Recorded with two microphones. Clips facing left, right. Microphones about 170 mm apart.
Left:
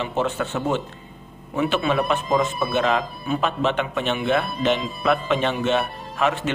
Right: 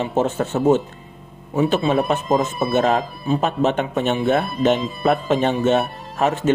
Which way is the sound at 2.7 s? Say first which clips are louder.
Right 5 dB; 40° right (ahead or behind).